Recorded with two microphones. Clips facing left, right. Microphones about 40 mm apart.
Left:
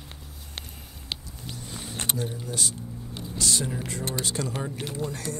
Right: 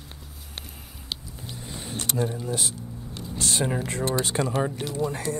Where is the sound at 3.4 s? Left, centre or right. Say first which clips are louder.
Right 3 dB; right.